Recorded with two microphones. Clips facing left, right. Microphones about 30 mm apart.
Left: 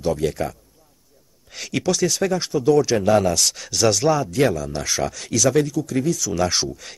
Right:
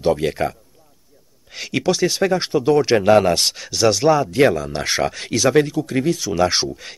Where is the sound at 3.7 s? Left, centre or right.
Centre.